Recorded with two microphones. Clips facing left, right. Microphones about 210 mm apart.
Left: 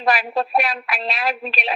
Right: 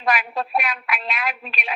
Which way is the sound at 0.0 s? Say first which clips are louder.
Left 3 dB; 35° left (ahead or behind).